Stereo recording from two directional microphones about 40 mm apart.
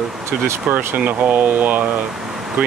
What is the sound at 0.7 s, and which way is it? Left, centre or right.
Speech, right.